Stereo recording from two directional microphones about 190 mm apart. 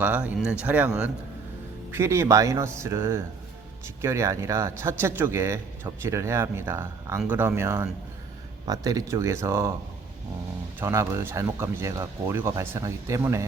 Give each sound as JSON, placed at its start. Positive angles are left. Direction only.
{"t": 0.0, "sound": "speech", "side_deg": -10}
{"t": 10.8, "sound": "speech", "side_deg": -15}